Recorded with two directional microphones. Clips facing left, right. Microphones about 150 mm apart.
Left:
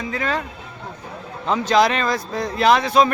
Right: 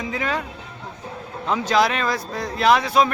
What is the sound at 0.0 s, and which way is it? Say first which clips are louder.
Speech: left 1 dB; 15° right (ahead or behind).